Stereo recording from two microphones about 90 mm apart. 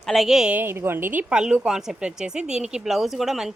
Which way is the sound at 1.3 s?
10° right (ahead or behind).